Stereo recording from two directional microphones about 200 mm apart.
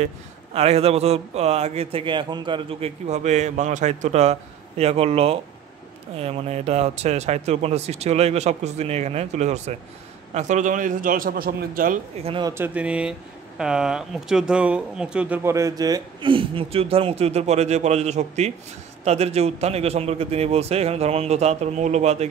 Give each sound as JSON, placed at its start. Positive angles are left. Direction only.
{"t": 0.0, "sound": "a man's voice", "side_deg": -30}
{"t": 12.2, "sound": "a man's voice", "side_deg": -25}